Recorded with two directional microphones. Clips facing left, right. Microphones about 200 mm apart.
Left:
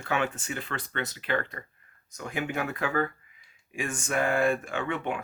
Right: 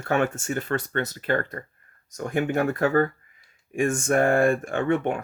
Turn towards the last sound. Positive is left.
turn(degrees=-45)  # may be behind; listen again after turning